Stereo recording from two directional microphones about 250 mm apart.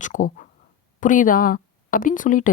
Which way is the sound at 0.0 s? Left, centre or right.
Left.